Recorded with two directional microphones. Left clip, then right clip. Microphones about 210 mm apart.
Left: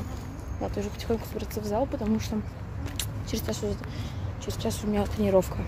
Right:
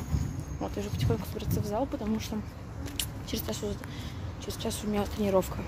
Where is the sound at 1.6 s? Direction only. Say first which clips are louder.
Left 4 dB; 10° left (ahead or behind).